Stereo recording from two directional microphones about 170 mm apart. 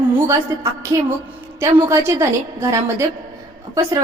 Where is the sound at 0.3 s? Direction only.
20° right (ahead or behind).